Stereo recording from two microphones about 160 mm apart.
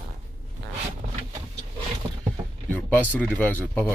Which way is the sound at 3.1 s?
10° left (ahead or behind).